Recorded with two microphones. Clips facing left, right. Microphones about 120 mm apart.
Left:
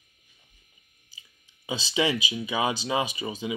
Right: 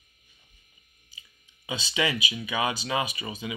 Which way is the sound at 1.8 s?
30° left (ahead or behind).